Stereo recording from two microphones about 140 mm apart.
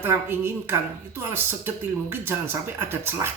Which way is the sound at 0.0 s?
15° right (ahead or behind).